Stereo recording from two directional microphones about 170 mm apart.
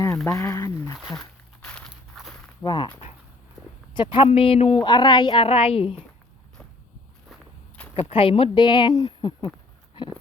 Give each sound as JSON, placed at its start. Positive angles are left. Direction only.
{"t": 0.3, "sound": "speech", "side_deg": 15}
{"t": 0.9, "sound": "walk", "side_deg": 0}
{"t": 2.6, "sound": "speech", "side_deg": 25}
{"t": 3.9, "sound": "speech", "side_deg": 30}
{"t": 7.9, "sound": "speech", "side_deg": 35}